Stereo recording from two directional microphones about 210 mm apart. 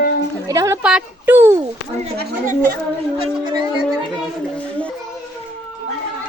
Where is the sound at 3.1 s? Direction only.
20° right (ahead or behind).